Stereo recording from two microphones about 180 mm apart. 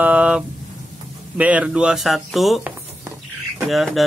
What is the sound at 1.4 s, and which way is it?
Speech, 5° right (ahead or behind).